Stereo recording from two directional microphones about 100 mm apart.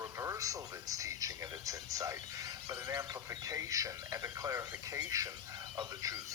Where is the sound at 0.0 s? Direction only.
30° right (ahead or behind).